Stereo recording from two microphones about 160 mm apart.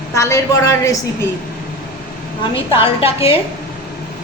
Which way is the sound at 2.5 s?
35° left (ahead or behind).